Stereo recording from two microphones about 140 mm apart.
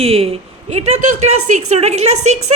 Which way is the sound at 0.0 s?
45° right (ahead or behind).